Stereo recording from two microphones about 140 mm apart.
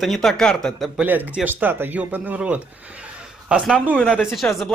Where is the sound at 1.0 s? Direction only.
10° right (ahead or behind).